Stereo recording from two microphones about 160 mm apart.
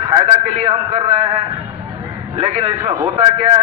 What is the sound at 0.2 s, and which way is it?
A man's voice, 40° right (ahead or behind).